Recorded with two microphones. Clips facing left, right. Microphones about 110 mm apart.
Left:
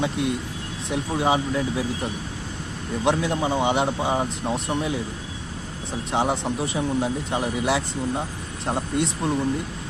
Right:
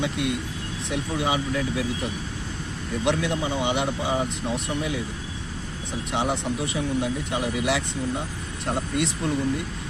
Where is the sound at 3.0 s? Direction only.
35° left (ahead or behind).